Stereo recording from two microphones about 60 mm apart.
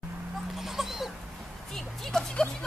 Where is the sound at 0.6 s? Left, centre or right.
Centre.